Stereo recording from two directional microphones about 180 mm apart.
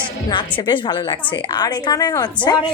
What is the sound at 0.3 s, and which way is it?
A woman's voice, 25° left (ahead or behind).